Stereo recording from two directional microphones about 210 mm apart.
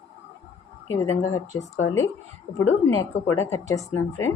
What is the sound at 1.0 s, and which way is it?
Speech, 15° left (ahead or behind).